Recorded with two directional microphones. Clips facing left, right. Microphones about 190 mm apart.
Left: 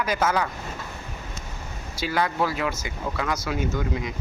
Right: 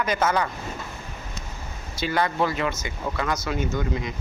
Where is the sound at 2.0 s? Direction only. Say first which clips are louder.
Right 1 dB; 5° left (ahead or behind).